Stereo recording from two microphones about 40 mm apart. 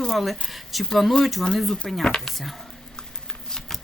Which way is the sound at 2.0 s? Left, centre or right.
Centre.